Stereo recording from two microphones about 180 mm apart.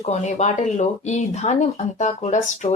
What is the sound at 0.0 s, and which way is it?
Speech, 40° left (ahead or behind).